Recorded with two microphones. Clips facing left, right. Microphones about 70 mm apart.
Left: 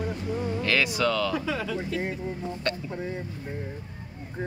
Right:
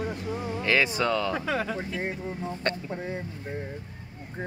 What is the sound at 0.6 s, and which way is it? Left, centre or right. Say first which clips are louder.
Speech: right 2 dB; right.